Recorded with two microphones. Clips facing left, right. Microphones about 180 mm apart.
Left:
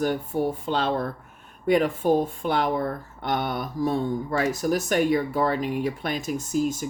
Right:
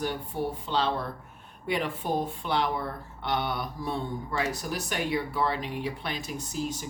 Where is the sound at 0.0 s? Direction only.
45° left (ahead or behind).